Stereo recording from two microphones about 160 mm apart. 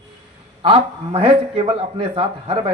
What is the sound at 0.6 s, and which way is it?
A man's voice, 35° right (ahead or behind).